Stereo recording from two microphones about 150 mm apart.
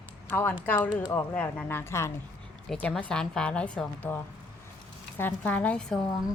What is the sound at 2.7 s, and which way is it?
A woman's voice, 5° left (ahead or behind).